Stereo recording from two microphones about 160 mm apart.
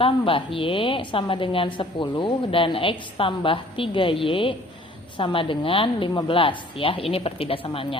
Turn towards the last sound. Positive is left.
turn(degrees=35)  # may be behind; listen again after turning